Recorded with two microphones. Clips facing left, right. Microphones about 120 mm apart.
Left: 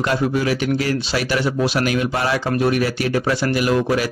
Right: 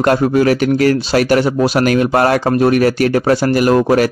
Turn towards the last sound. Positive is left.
turn(degrees=-50)  # may be behind; listen again after turning